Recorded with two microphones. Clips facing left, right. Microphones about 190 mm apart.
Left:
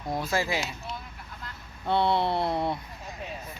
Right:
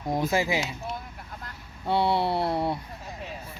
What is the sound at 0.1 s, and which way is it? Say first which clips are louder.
Speech: right 3 dB; 15° right (ahead or behind).